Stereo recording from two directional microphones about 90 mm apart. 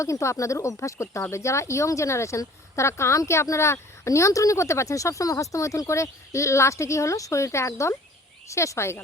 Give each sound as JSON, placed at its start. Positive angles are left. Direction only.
{"t": 0.0, "sound": "speech", "side_deg": 35}